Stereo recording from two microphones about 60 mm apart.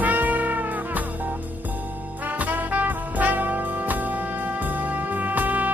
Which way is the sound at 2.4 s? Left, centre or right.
Right.